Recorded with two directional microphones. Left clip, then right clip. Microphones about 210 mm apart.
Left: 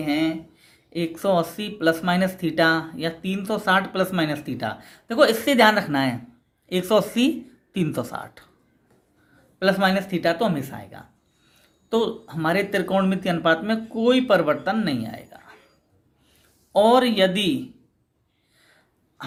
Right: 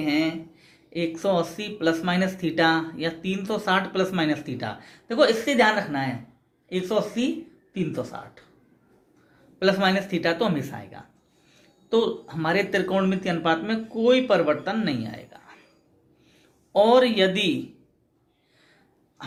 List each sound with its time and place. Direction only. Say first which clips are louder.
0.0 s speech: left 1 dB; 25° left (ahead or behind)
9.6 s speech: left 1 dB; 25° left (ahead or behind)
16.7 s speech: left 1 dB; 30° left (ahead or behind)